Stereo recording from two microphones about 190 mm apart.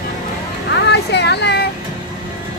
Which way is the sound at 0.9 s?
65° left (ahead or behind).